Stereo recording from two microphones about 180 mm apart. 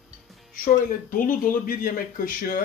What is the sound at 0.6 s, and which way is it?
Speech, 50° left (ahead or behind).